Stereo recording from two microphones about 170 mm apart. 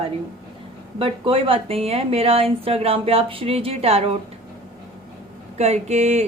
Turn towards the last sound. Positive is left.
turn(degrees=-40)  # may be behind; listen again after turning